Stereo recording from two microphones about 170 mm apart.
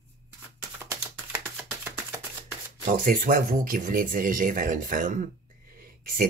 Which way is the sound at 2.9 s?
55° right (ahead or behind).